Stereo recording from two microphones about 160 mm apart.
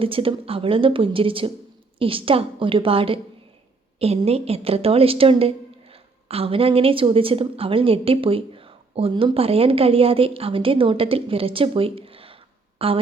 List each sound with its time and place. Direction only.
0.0 s a woman's voice: 35° right (ahead or behind)